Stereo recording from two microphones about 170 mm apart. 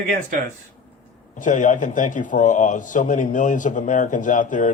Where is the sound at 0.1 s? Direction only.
50° right (ahead or behind).